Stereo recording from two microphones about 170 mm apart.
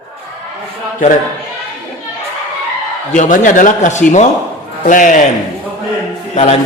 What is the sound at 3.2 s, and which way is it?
Speech, 50° left (ahead or behind).